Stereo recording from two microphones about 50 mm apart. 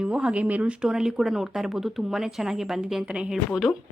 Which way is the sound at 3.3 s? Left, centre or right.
Centre.